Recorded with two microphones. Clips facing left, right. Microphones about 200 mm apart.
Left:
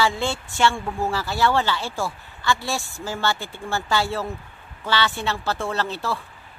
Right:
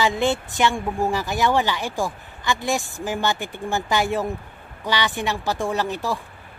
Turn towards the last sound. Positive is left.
turn(degrees=-15)  # may be behind; listen again after turning